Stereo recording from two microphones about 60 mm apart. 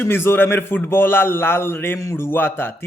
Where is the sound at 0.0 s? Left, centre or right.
Left.